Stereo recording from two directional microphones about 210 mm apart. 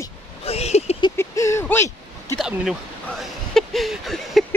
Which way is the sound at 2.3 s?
Centre (ahead or behind).